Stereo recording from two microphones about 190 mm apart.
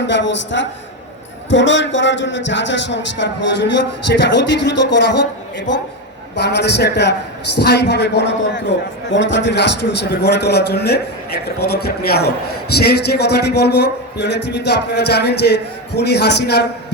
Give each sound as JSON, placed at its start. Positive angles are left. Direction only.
{"t": 0.1, "sound": "a man's voice", "side_deg": 70}